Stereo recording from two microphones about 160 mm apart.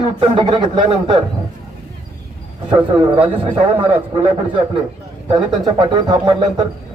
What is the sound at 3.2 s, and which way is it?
A man's voice, 35° right (ahead or behind).